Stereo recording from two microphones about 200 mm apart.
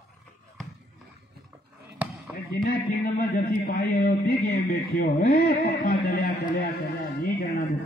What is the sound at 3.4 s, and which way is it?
A man's voice, 50° left (ahead or behind).